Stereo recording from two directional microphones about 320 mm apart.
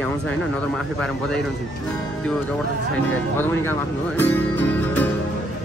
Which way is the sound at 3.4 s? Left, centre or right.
Centre.